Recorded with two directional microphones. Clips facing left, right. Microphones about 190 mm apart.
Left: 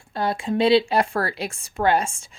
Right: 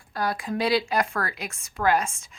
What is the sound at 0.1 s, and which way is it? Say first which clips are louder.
Speech: left 4 dB; 25° left (ahead or behind).